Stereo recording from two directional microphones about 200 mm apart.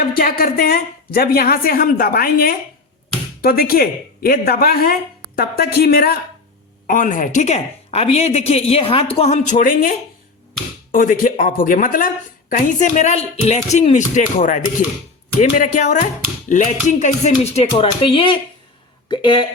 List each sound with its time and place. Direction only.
0.0 s a woman's voice: 45° left (ahead or behind)
10.9 s speech: 45° left (ahead or behind); by 19.5 s 25° left (ahead or behind)